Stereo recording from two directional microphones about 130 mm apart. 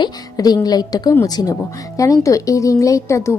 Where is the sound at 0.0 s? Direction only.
30° left (ahead or behind).